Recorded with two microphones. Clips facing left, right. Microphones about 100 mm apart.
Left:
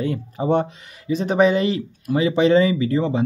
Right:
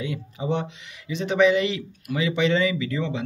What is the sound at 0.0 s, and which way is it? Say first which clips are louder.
Speech: left 6 dB; 45° left (ahead or behind).